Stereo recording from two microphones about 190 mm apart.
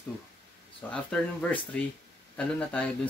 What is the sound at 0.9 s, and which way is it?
Speech, 5° left (ahead or behind).